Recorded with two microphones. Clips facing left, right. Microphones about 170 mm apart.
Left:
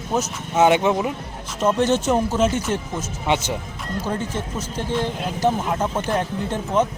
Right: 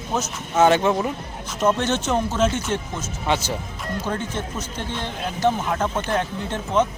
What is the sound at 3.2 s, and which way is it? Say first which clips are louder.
Speech: left 1 dB; 20° left (ahead or behind).